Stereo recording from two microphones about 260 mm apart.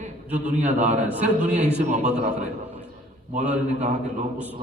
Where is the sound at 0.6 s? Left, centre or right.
Right.